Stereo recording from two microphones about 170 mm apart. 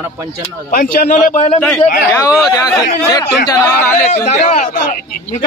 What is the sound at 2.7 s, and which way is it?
Speech, 20° left (ahead or behind).